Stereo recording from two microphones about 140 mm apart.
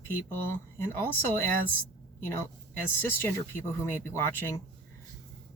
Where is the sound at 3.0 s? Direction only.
15° left (ahead or behind).